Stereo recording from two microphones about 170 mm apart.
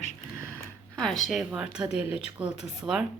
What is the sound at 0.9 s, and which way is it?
Speech, 5° left (ahead or behind).